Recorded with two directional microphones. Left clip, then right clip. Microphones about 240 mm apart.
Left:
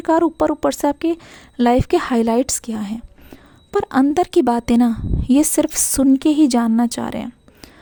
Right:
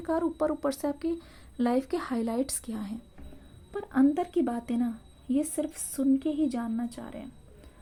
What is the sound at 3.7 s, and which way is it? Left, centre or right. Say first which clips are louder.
A woman's voice: left 10 dB; left.